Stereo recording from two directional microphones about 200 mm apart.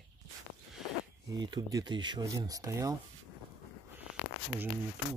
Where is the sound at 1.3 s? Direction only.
20° right (ahead or behind).